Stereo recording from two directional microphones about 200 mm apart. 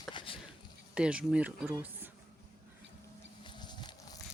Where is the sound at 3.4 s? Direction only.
25° left (ahead or behind).